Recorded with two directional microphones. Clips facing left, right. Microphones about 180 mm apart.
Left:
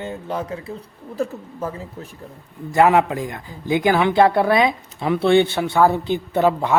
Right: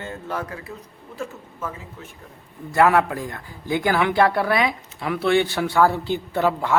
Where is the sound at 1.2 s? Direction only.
35° left (ahead or behind).